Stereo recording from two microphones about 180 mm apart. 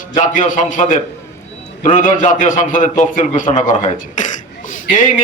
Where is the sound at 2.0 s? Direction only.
45° left (ahead or behind).